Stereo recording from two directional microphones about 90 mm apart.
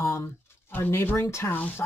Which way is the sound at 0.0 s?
35° left (ahead or behind).